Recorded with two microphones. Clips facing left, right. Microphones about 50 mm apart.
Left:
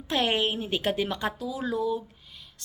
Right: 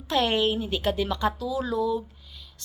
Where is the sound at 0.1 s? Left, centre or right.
Left.